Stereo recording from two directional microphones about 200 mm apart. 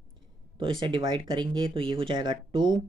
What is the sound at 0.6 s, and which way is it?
Speech, 25° right (ahead or behind).